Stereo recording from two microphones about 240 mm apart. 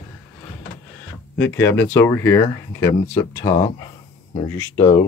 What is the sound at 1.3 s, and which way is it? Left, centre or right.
Speech, centre.